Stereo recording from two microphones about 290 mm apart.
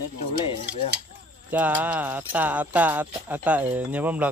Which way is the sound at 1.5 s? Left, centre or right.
Centre.